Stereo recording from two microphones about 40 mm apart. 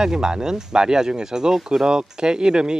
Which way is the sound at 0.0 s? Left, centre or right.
Centre.